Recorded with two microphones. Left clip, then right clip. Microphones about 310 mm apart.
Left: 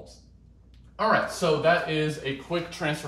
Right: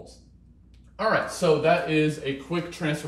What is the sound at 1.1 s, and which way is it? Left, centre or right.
Speech, centre.